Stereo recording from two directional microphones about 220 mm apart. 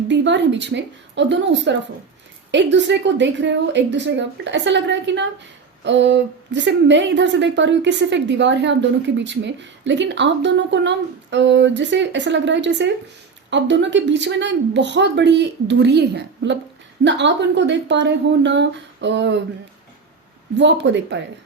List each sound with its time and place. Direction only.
0.1 s a woman's voice: 55° right (ahead or behind)
20.6 s speech: 55° right (ahead or behind)